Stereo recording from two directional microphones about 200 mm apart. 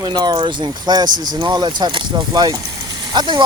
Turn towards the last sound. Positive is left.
turn(degrees=-25)  # may be behind; listen again after turning